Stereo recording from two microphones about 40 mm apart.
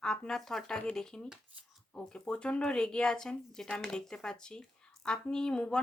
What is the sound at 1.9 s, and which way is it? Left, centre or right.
A woman's voice, left.